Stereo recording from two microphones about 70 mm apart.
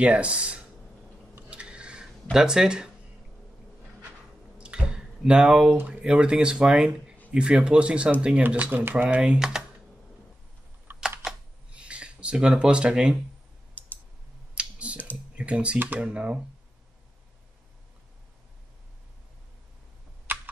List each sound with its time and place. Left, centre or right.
0.0 s speech: centre
1.5 s a sound: centre
2.3 s speech: centre
4.6 s drip: centre
5.9 s speech: centre
9.1 s speech: centre
11.0 s computer keyboard: centre
13.8 s a sound: left
14.5 s a sound: centre
15.3 s speech: centre